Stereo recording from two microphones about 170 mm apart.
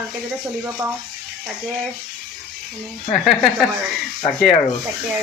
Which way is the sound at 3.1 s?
Centre (ahead or behind).